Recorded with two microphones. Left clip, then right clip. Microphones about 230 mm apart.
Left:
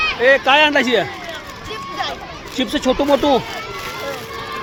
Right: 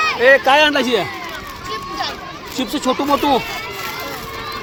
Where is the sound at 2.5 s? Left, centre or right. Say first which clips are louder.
Left 2 dB; centre.